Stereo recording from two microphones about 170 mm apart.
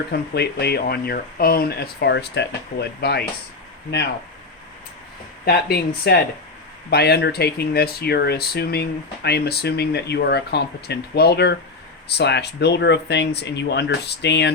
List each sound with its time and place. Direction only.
0.1 s speech: 70° left (ahead or behind)
5.5 s speech: 70° left (ahead or behind); by 14.5 s 90° left